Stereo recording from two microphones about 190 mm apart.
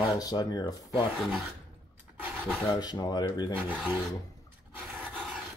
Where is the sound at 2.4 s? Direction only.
10° left (ahead or behind).